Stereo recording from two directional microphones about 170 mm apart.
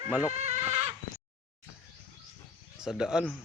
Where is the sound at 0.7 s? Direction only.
40° right (ahead or behind).